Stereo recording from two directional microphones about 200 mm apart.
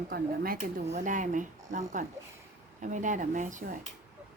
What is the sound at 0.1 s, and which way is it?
Speech, 45° right (ahead or behind).